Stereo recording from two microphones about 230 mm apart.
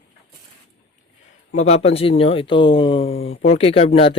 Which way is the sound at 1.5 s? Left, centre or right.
Left.